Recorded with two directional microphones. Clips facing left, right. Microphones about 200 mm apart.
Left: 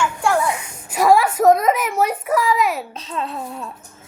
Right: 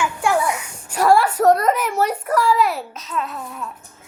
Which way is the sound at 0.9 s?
10° left (ahead or behind).